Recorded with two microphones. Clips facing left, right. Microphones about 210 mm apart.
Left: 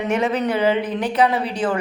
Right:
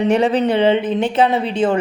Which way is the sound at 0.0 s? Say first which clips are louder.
Right 5 dB; 30° right (ahead or behind).